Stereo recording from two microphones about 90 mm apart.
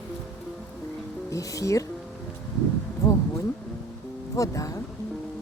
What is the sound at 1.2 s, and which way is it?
Speech, 35° left (ahead or behind).